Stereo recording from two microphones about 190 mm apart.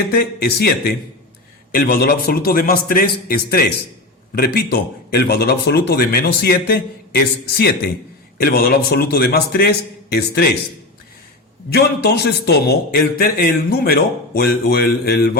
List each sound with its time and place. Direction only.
0.2 s a man's voice: 55° left (ahead or behind)
11.7 s a man's voice: 60° left (ahead or behind)